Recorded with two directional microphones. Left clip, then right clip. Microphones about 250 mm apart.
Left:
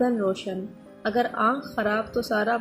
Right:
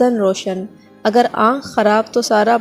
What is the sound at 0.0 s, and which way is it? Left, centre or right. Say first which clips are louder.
A woman's voice: right 10 dB; right.